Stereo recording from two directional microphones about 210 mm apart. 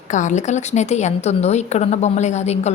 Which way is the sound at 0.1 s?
35° left (ahead or behind).